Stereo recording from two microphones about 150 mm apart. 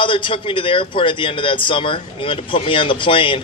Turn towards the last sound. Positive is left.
turn(degrees=35)  # may be behind; listen again after turning